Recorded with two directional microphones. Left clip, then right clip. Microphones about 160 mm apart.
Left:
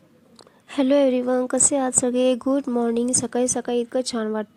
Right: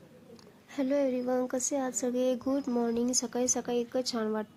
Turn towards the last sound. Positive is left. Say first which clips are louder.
# left 7 dB
turn(degrees=30)  # may be behind; listen again after turning